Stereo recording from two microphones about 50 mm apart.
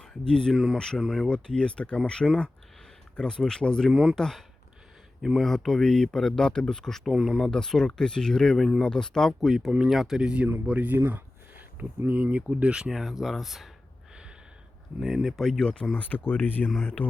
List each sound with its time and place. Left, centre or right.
0.0 s speech: centre
0.5 s speech: centre
1.3 s speech: centre
7.1 s speech: centre
7.5 s speech: centre
9.4 s speech: centre
10.2 s speech: centre
10.7 s speech: right
11.1 s a sound: right
12.1 s speech: right
12.9 s speech: centre
15.0 s speech: centre
15.6 s speech: centre
16.0 s speech: left